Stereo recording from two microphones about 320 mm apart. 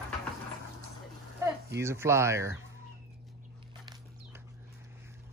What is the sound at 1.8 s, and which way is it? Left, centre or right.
Speech, centre.